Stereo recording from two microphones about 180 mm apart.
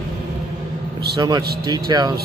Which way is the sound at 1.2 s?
20° right (ahead or behind).